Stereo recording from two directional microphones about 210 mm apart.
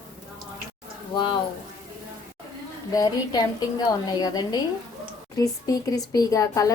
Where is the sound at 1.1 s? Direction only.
20° left (ahead or behind).